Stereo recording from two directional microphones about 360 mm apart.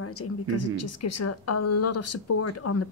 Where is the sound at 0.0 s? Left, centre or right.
Left.